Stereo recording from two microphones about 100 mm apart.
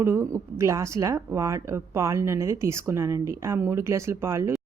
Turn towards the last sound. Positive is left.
turn(degrees=-30)  # may be behind; listen again after turning